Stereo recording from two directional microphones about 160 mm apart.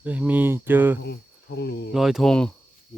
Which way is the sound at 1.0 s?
90° left.